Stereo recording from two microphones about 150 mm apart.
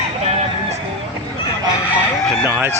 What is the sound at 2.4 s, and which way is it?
Speech, 15° right (ahead or behind).